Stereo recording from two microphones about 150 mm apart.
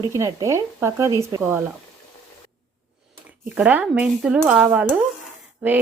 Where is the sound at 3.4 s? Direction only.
10° right (ahead or behind).